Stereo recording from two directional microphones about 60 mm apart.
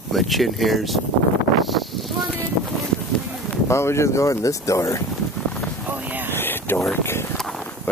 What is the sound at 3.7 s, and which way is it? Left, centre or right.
Speech, left.